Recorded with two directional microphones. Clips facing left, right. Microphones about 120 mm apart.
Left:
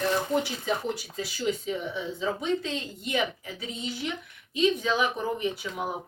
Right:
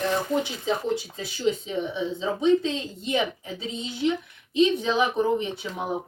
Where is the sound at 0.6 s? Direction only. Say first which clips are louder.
Right 4 dB; 25° right (ahead or behind).